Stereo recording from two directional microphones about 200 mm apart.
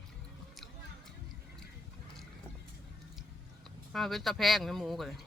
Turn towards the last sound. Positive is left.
turn(degrees=0)  # may be behind; listen again after turning